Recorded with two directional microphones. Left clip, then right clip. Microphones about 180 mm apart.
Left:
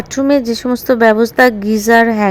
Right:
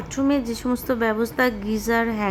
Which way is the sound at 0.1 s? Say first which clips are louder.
Left 10 dB; 35° left (ahead or behind).